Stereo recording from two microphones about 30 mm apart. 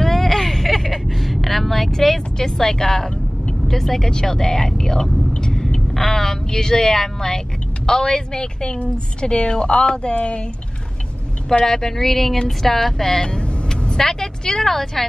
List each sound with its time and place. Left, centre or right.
0.0 s vehicle: centre
1.9 s speech: centre; by 10.4 s left
11.6 s a woman's voice: centre
14.7 s a woman's voice: centre